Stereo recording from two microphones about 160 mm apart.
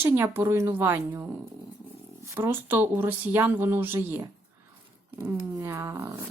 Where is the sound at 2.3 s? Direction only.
15° right (ahead or behind).